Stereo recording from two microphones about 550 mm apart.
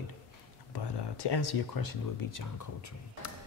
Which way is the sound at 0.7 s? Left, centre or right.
Left.